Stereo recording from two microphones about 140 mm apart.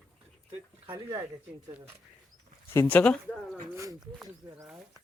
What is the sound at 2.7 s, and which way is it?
Speech, 15° left (ahead or behind).